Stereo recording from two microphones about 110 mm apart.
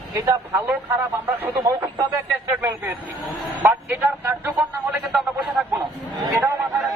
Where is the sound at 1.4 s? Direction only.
25° right (ahead or behind).